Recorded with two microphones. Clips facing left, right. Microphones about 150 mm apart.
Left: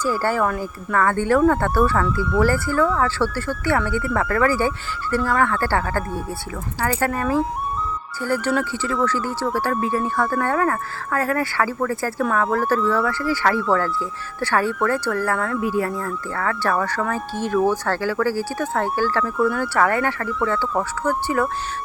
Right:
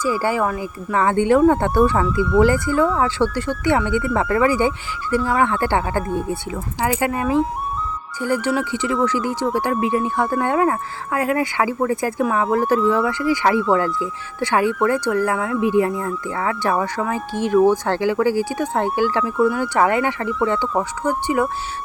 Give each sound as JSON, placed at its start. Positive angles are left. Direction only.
{"t": 0.0, "sound": "speech", "side_deg": -10}